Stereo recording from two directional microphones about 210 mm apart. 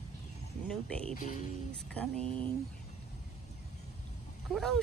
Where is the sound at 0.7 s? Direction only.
5° left (ahead or behind).